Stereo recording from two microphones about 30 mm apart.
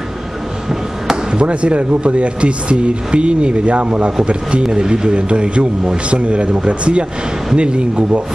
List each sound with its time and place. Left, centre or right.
1.3 s speech: right
4.7 s speech: right